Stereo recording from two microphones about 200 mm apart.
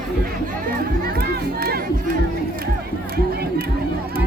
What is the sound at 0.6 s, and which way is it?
Music, 50° right (ahead or behind).